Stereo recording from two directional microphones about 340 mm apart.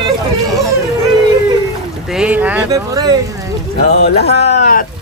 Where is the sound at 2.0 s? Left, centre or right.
Centre.